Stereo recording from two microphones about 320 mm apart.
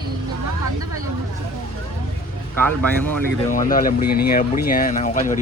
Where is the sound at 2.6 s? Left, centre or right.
Centre.